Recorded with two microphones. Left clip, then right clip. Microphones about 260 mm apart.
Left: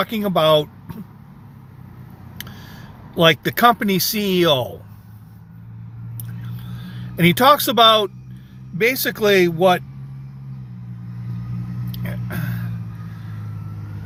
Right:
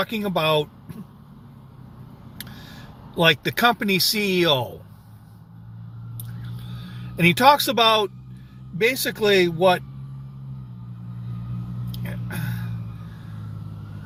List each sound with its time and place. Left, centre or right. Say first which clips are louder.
0.1 s speech: left 6 dB; centre
3.2 s speech: left 4 dB; centre
6.8 s speech: left 2 dB; centre
12.0 s a sound: left 3 dB; centre